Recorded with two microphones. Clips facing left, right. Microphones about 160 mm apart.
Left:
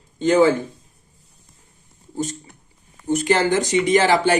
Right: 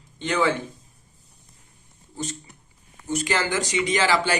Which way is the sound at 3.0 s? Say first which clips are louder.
Left 7 dB; 50° left (ahead or behind).